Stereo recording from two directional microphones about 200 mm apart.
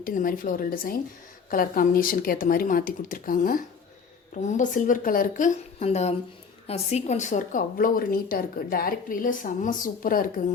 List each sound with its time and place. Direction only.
0.0 s a woman's voice: 45° left (ahead or behind)